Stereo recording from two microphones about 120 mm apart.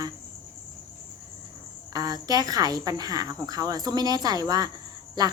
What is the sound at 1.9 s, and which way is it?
Speech, 30° right (ahead or behind).